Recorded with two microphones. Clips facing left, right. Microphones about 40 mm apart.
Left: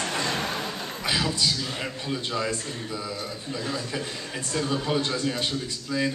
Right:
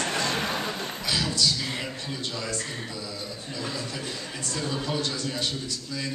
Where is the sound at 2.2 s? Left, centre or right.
Left.